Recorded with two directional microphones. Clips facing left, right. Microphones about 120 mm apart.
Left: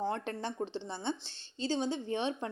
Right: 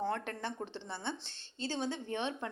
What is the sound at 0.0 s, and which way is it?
A woman's voice, 20° left (ahead or behind).